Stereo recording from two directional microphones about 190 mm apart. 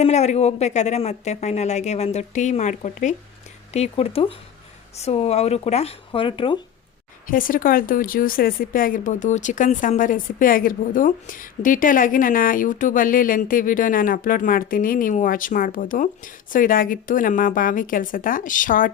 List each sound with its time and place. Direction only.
0.0 s speech: 35° left (ahead or behind)
7.3 s speech: 45° left (ahead or behind)